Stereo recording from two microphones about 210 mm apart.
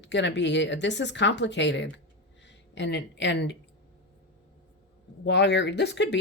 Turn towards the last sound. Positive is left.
turn(degrees=55)  # may be behind; listen again after turning